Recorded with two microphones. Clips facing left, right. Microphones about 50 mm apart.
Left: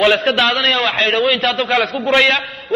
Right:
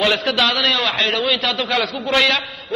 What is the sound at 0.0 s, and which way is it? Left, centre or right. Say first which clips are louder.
A man's voice: left 4 dB; left.